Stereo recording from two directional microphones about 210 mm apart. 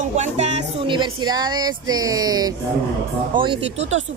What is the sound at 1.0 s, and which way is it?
Speech, 20° right (ahead or behind).